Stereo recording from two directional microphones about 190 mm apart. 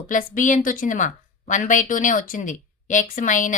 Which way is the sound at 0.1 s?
45° left (ahead or behind).